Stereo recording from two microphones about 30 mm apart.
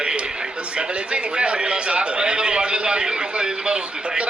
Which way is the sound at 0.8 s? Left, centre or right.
Right.